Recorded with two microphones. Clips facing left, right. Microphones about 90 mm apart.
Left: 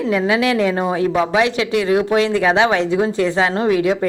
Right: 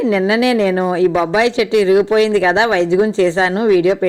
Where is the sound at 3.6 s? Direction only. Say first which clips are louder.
Right 7 dB; 30° left (ahead or behind).